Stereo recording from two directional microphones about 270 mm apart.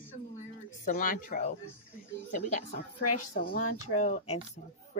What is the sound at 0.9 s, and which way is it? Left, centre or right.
Speech, left.